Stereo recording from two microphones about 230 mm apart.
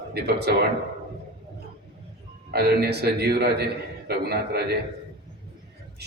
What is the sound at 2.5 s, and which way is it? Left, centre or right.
A man's voice, right.